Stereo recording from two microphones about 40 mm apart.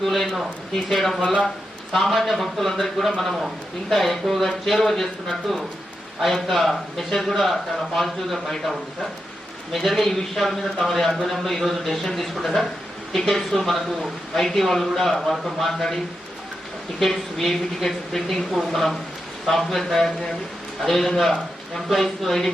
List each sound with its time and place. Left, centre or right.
0.0 s a man's voice: centre
1.2 s speech: left
1.9 s a man's voice: centre
9.7 s a man's voice: centre
17.0 s a man's voice: centre